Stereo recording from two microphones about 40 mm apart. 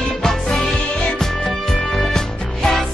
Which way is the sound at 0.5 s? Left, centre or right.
Centre.